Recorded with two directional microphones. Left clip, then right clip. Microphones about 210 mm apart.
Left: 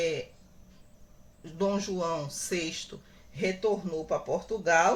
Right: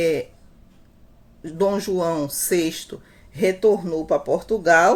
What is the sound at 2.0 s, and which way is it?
Speech, 35° right (ahead or behind).